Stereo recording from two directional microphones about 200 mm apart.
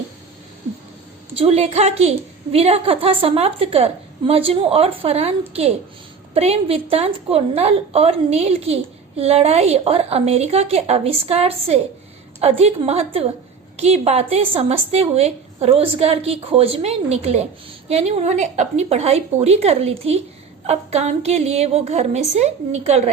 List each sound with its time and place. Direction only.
1.3 s a woman's voice: 30° right (ahead or behind)
6.3 s a woman's voice: 30° right (ahead or behind)